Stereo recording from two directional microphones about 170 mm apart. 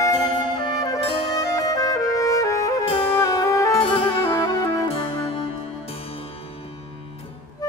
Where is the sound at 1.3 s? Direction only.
20° left (ahead or behind).